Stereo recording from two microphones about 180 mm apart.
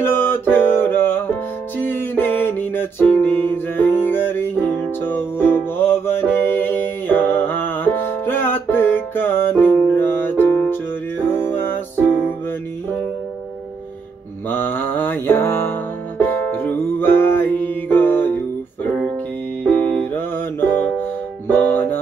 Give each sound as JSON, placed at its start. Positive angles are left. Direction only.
{"t": 0.0, "sound": "music", "side_deg": 10}
{"t": 14.5, "sound": "music", "side_deg": 10}
{"t": 19.6, "sound": "music", "side_deg": 10}